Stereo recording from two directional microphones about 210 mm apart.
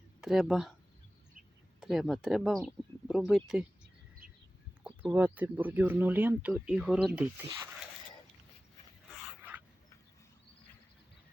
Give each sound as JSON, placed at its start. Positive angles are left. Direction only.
{"t": 0.2, "sound": "speech", "side_deg": 0}
{"t": 1.8, "sound": "speech", "side_deg": 0}
{"t": 4.2, "sound": "bird", "side_deg": -45}
{"t": 5.0, "sound": "speech", "side_deg": -10}
{"t": 9.0, "sound": "dog", "side_deg": 0}